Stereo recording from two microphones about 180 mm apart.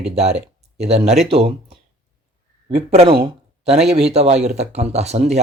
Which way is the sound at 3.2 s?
35° right (ahead or behind).